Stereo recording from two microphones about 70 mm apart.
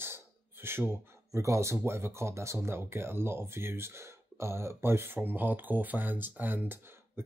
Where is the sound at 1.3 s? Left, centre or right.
Right.